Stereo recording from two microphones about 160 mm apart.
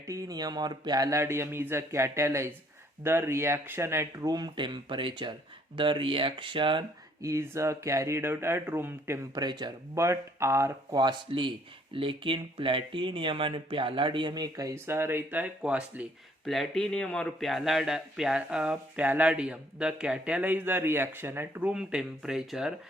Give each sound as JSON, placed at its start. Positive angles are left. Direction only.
{"t": 0.1, "sound": "speech", "side_deg": -25}
{"t": 7.2, "sound": "speech", "side_deg": -15}
{"t": 16.5, "sound": "a man's voice", "side_deg": 0}